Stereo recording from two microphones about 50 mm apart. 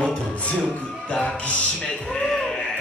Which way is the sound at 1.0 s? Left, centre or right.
Left.